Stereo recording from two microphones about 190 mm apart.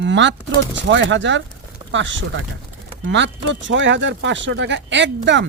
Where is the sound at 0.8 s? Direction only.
70° right (ahead or behind).